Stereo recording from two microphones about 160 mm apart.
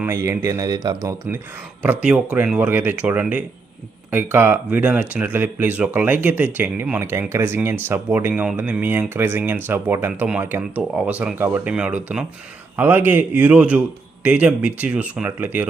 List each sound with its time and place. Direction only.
0.0 s speech: 15° right (ahead or behind)
1.8 s speech: 10° right (ahead or behind)